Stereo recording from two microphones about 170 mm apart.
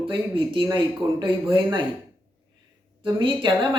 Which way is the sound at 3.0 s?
30° right (ahead or behind).